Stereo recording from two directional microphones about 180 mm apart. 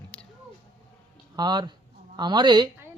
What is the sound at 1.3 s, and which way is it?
Speech, 25° right (ahead or behind).